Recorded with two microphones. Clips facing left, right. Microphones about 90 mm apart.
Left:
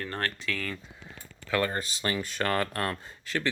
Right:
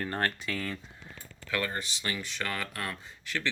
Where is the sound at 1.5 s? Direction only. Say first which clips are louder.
Left 5 dB; 30° left (ahead or behind).